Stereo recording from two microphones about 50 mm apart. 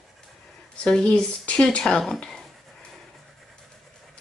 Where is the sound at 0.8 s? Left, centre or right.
Centre.